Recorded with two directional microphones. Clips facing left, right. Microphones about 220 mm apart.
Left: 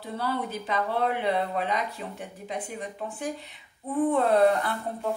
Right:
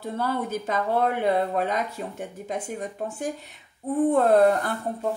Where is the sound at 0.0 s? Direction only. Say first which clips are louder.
Right 3 dB; 45° right (ahead or behind).